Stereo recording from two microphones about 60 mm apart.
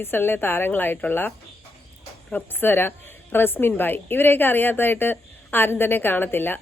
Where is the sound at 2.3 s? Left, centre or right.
Left.